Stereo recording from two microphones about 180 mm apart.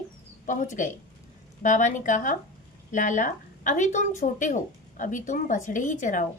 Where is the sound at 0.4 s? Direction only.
45° left (ahead or behind).